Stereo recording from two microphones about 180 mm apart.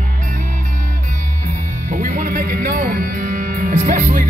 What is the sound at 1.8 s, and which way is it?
Music, 45° right (ahead or behind).